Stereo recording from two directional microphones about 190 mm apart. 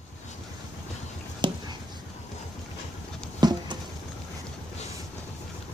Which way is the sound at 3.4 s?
20° right (ahead or behind).